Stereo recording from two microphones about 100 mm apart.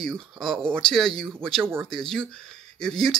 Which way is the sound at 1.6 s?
25° right (ahead or behind).